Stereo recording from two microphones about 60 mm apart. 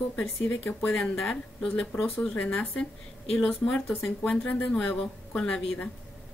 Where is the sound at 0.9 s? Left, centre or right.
Centre.